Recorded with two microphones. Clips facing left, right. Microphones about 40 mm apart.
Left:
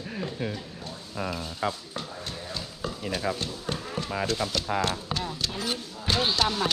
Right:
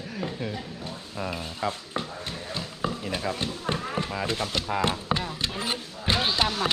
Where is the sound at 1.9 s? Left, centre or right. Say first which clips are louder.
Right 3 dB; right.